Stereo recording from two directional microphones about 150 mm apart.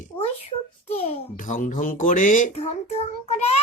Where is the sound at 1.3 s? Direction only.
60° left (ahead or behind).